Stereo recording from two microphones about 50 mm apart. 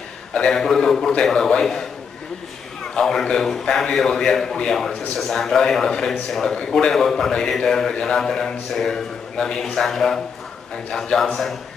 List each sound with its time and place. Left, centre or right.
0.5 s a man's voice: centre
1.1 s a man's voice: centre
2.9 s a man's voice: centre
6.9 s a man's voice: centre
11.1 s a man's voice: centre